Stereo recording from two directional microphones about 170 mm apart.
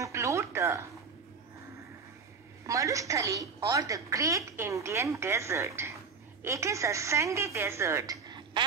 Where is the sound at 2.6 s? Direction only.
20° right (ahead or behind).